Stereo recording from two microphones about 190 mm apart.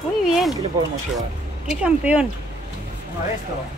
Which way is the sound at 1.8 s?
5° right (ahead or behind).